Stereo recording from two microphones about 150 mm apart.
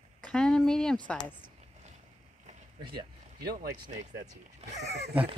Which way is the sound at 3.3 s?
90° right.